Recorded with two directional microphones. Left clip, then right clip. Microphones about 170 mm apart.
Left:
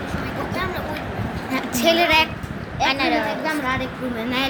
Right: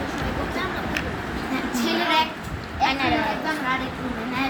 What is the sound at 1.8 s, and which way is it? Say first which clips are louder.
Speech: left 6 dB; 85° left.